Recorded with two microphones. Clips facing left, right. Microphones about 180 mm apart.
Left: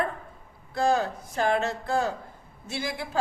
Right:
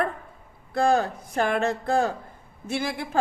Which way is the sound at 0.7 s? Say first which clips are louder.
Right 3 dB; 55° right (ahead or behind).